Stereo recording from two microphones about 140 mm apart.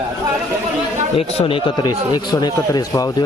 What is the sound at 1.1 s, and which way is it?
Speech, 45° left (ahead or behind).